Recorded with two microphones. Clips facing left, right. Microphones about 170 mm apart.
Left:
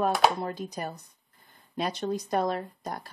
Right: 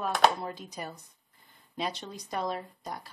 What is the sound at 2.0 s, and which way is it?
Speech, 50° left (ahead or behind).